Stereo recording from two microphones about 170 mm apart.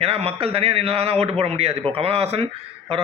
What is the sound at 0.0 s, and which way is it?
A man's voice, 35° right (ahead or behind).